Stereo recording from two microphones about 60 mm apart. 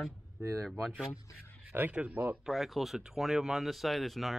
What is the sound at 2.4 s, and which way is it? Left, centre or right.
Speech, centre.